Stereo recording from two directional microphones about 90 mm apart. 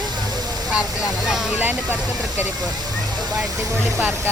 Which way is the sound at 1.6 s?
20° right (ahead or behind).